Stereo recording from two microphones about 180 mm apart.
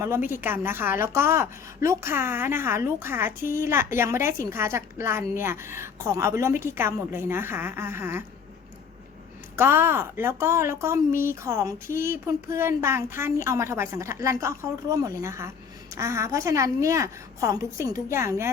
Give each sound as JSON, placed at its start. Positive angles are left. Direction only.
{"t": 0.4, "sound": "a woman's voice", "side_deg": -10}
{"t": 9.6, "sound": "a woman's voice", "side_deg": -15}
{"t": 11.1, "sound": "speech", "side_deg": 50}
{"t": 11.4, "sound": "a woman's voice", "side_deg": -15}